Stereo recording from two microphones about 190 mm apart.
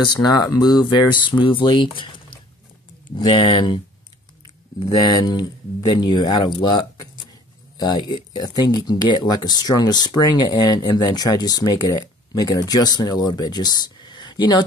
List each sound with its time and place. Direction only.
0.0 s speech: 20° left (ahead or behind)